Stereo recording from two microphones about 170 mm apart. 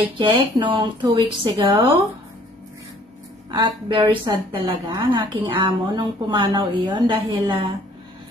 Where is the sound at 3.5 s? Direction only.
25° right (ahead or behind).